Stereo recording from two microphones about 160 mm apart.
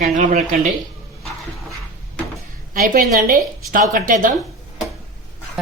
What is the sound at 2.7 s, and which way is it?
A woman's voice, 65° right (ahead or behind).